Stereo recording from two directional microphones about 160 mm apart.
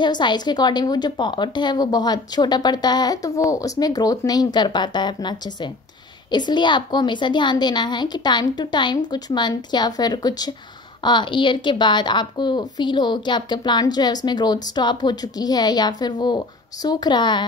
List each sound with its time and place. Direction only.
0.0 s a woman's voice: 30° left (ahead or behind)